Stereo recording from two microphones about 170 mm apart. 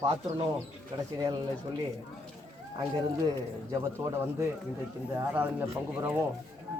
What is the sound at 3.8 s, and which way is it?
Speech, 15° right (ahead or behind).